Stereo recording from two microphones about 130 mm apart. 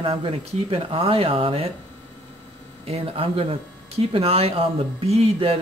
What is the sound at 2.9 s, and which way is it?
Speech, 45° right (ahead or behind).